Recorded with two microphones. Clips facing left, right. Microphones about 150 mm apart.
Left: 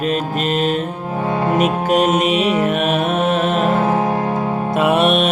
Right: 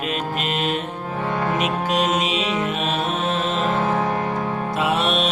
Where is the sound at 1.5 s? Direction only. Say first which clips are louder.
Left 9 dB; 50° left (ahead or behind).